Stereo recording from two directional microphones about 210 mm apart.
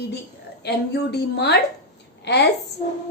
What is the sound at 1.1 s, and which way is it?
A woman's voice, 55° left (ahead or behind).